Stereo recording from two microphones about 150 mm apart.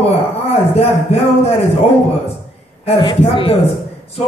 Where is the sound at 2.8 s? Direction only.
40° left (ahead or behind).